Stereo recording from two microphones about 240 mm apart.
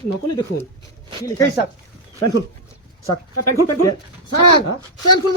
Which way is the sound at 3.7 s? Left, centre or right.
Left.